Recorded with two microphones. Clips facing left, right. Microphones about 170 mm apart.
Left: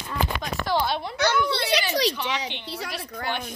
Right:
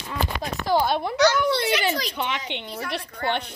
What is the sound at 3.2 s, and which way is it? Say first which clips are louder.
Speech: right 4 dB; 65° right (ahead or behind).